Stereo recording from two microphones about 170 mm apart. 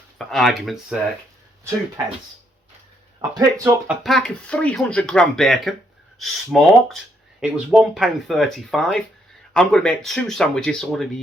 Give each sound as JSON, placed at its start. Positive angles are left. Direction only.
{"t": 0.2, "sound": "speech", "side_deg": 0}
{"t": 3.2, "sound": "speech", "side_deg": -25}
{"t": 3.8, "sound": "speech", "side_deg": 0}